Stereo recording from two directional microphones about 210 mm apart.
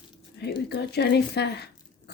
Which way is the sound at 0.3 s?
50° left (ahead or behind).